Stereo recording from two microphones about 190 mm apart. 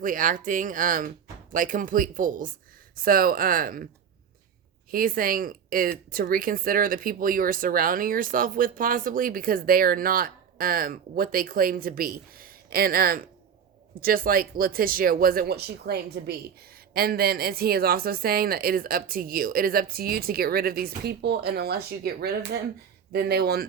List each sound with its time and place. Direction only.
0.0 s speech: 45° right (ahead or behind)
4.9 s speech: 50° right (ahead or behind)